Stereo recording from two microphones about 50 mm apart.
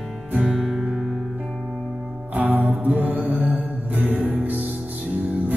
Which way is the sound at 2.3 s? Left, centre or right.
Right.